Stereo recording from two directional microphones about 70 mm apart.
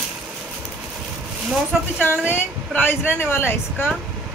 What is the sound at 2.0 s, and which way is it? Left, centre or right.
A woman's voice, left.